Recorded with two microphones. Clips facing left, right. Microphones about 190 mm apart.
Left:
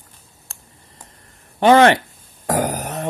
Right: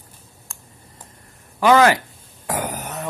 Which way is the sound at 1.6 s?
30° left (ahead or behind).